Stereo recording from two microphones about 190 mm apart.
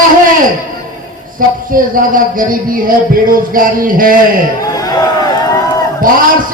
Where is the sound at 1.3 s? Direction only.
45° right (ahead or behind).